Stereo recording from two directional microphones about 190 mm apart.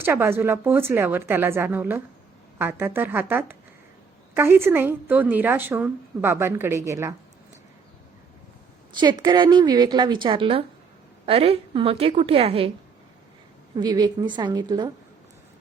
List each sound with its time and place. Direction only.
0.0 s a woman's voice: 15° right (ahead or behind)
9.0 s a woman's voice: 25° right (ahead or behind)
13.7 s a woman's voice: 20° right (ahead or behind)